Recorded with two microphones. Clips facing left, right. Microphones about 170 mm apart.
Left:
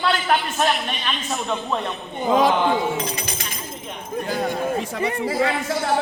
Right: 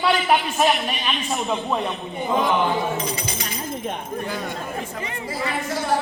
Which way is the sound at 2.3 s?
85° left.